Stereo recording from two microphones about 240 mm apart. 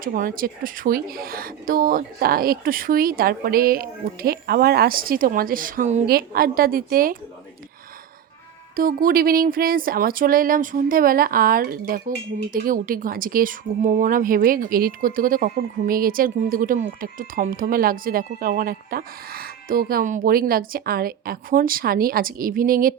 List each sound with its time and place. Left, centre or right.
0.0 s speech: right
8.7 s speech: right